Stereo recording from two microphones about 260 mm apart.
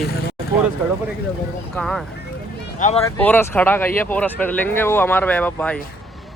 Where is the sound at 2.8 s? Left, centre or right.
Left.